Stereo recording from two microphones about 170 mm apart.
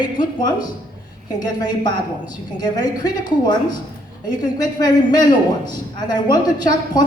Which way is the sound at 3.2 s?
25° left (ahead or behind).